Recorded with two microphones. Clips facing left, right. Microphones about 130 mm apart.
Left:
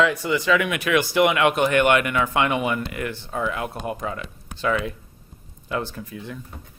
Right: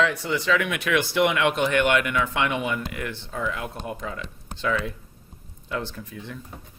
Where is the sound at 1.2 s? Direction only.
55° left (ahead or behind).